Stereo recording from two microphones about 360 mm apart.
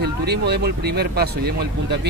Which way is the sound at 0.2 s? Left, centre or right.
Right.